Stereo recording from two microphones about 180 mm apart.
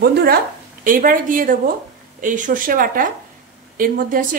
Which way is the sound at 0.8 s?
50° right (ahead or behind).